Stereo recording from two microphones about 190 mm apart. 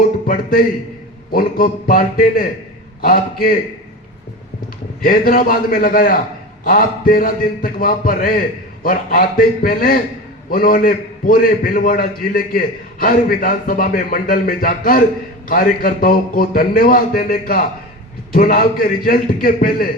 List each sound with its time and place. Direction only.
1.3 s a man's voice: 50° left (ahead or behind)
5.0 s a man's voice: 45° left (ahead or behind)